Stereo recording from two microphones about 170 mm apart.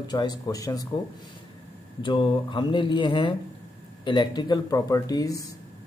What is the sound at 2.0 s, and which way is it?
Speech, 30° left (ahead or behind).